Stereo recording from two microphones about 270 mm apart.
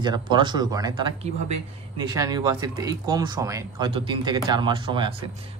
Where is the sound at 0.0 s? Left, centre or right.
Centre.